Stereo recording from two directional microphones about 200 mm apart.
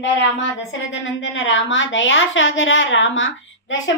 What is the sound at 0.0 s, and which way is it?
A woman's voice, 70° left (ahead or behind).